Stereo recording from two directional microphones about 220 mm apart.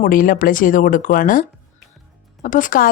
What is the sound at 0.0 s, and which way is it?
Speech, 40° left (ahead or behind).